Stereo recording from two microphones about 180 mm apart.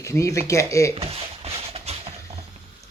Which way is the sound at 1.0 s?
35° right (ahead or behind).